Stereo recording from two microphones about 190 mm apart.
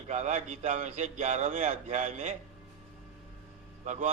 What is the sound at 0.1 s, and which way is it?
A man's voice, 35° right (ahead or behind).